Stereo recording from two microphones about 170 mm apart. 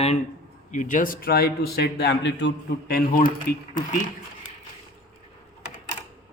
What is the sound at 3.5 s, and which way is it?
Speech, 60° left (ahead or behind).